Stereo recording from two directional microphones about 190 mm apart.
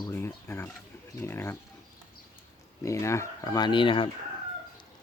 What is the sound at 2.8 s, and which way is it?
Speech, 15° left (ahead or behind).